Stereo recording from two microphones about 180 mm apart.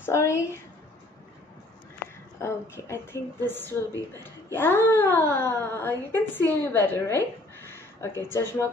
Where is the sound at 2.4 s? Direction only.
15° left (ahead or behind).